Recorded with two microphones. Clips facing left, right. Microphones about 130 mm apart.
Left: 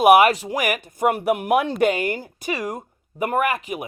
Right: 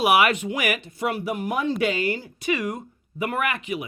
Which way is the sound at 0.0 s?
45° left (ahead or behind).